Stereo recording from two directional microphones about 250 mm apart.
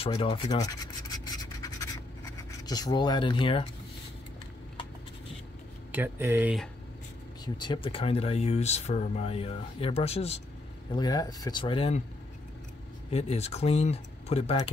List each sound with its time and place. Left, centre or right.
0.0 s speech: left
1.1 s scratch: centre
2.6 s speech: centre
5.9 s speech: centre
7.4 s speech: centre
13.1 s speech: left